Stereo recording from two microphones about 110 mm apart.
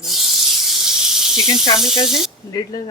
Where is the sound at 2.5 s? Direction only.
35° left (ahead or behind).